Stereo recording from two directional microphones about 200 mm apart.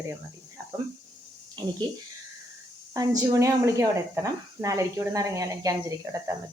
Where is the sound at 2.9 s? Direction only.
20° right (ahead or behind).